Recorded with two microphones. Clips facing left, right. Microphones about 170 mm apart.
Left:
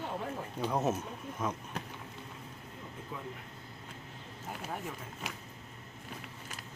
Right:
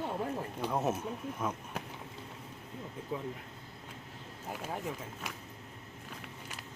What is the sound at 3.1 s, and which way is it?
Speech, 25° right (ahead or behind).